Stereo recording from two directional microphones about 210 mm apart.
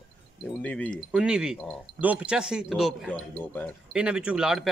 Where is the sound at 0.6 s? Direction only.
5° left (ahead or behind).